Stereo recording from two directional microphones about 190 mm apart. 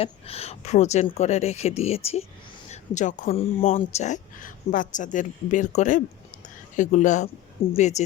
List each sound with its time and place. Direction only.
0.0 s speech: 30° left (ahead or behind)